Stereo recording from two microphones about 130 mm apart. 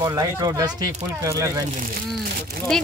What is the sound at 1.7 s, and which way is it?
Speech, 90° right.